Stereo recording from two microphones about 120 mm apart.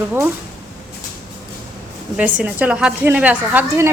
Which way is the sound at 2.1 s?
10° right (ahead or behind).